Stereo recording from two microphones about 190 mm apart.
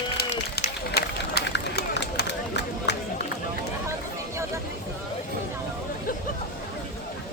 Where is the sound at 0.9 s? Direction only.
60° left (ahead or behind).